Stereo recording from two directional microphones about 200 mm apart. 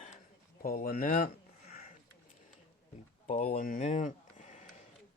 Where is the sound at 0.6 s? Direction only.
45° left (ahead or behind).